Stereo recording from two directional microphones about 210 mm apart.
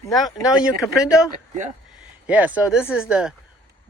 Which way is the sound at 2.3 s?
5° right (ahead or behind).